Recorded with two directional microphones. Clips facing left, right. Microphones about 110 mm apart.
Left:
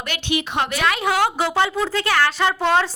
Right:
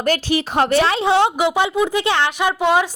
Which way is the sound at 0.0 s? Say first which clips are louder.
Right 6 dB; 40° right (ahead or behind).